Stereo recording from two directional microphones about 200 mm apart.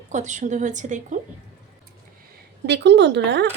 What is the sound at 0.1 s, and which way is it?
A woman's voice, 35° right (ahead or behind).